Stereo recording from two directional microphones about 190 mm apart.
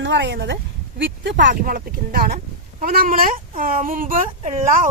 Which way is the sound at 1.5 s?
45° right (ahead or behind).